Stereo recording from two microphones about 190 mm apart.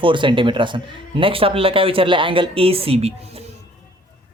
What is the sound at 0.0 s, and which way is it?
Speech, 25° right (ahead or behind).